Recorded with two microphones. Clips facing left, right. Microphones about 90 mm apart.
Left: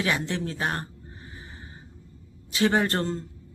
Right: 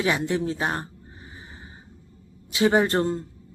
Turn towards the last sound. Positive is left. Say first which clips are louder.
# right 4 dB
turn(degrees=-15)  # may be behind; listen again after turning